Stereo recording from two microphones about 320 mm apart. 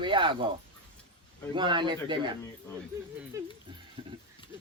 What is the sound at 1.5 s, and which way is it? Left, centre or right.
Speech, centre.